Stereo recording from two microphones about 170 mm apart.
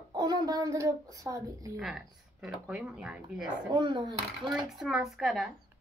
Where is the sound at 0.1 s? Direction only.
25° right (ahead or behind).